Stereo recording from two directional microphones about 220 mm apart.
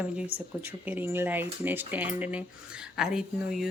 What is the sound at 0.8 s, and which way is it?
Speech, 10° right (ahead or behind).